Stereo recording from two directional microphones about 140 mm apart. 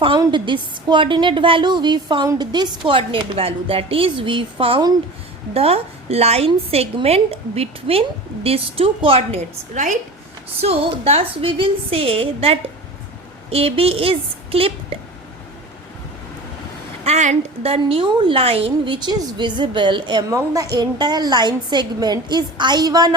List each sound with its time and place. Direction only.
0.2 s a woman's voice: 35° right (ahead or behind)
5.5 s a woman's voice: 45° right (ahead or behind)
9.7 s a woman's voice: 60° right (ahead or behind)
10.6 s a woman's voice: 45° right (ahead or behind)
17.0 s a woman's voice: 55° right (ahead or behind); by 20.2 s 35° right (ahead or behind)
20.3 s a woman's voice: 25° right (ahead or behind)